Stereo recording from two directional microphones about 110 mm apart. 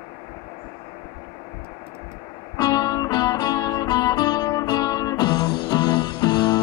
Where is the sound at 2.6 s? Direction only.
35° left (ahead or behind).